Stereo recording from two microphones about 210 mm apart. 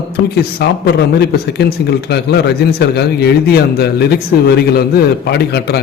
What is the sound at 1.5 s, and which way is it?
Speech, 50° left (ahead or behind).